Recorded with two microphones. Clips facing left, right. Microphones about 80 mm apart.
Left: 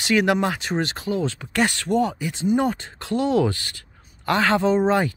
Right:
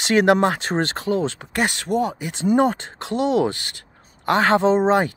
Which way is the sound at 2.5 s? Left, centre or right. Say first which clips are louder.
Right 3 dB; right.